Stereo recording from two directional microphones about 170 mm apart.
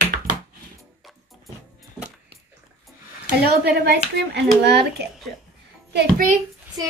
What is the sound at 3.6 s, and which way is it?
A child's voice, 75° right (ahead or behind).